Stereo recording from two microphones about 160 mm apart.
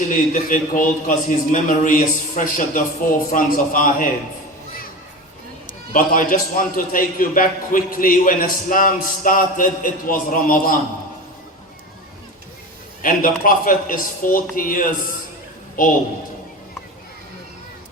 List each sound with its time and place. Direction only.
0.1 s a man's voice: 55° left (ahead or behind)
5.9 s a man's voice: 55° left (ahead or behind)
13.0 s a man's voice: 60° left (ahead or behind)